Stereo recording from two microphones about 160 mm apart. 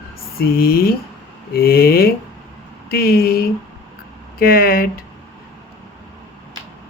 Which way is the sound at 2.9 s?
70° left (ahead or behind).